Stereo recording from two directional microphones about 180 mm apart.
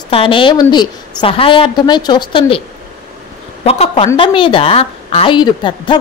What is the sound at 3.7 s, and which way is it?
A woman's voice, 35° left (ahead or behind).